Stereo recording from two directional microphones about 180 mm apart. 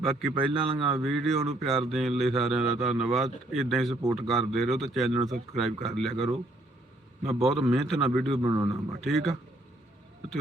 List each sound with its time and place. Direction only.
0.0 s speech: centre (ahead or behind)
7.2 s a man's voice: 35° right (ahead or behind)
7.4 s speech: centre (ahead or behind)
8.4 s a man's voice: 20° right (ahead or behind)
9.0 s speech: centre (ahead or behind)